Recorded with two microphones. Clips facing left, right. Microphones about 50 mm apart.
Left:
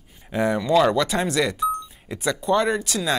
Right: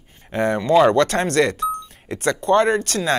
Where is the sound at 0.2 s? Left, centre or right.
Right.